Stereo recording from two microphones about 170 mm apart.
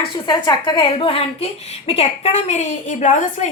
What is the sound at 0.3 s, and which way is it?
A woman's voice, 25° left (ahead or behind).